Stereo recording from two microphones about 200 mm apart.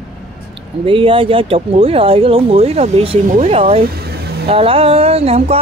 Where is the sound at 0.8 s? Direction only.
25° right (ahead or behind).